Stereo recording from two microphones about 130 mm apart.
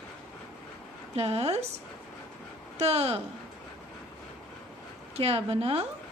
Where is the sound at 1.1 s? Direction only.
50° right (ahead or behind).